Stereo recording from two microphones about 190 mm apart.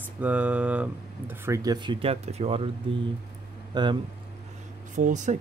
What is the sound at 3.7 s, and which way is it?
Speech, 25° right (ahead or behind).